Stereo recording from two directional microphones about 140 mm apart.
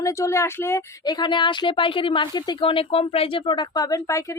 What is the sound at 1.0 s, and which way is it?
A woman's voice, 30° left (ahead or behind).